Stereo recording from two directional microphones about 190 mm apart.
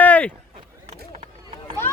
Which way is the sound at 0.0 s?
10° left (ahead or behind).